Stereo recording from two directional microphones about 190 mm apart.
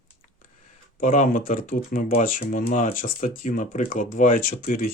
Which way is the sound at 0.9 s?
45° left (ahead or behind).